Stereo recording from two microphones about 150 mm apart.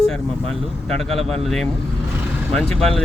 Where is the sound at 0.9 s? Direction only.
5° left (ahead or behind).